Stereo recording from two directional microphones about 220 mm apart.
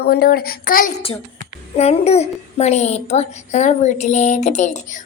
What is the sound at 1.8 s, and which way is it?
A child's voice, 30° left (ahead or behind).